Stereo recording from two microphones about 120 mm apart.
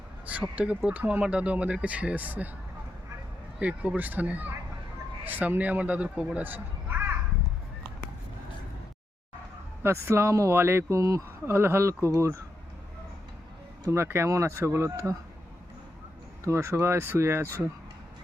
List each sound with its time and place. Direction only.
0.3 s speech: 10° right (ahead or behind)
3.6 s speech: 10° right (ahead or behind)
9.8 s speech: 20° right (ahead or behind)
13.9 s speech: 20° right (ahead or behind)
16.5 s speech: 25° right (ahead or behind)